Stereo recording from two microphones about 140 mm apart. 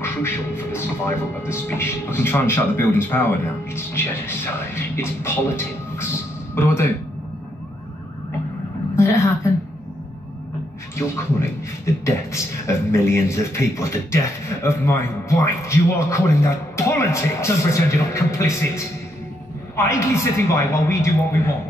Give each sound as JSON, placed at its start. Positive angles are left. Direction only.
{"t": 0.7, "sound": "a man's voice", "side_deg": 15}
{"t": 8.9, "sound": "a woman's voice", "side_deg": 20}
{"t": 11.0, "sound": "a man's voice", "side_deg": 20}